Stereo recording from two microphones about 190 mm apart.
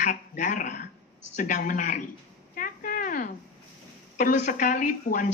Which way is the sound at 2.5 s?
45° left (ahead or behind).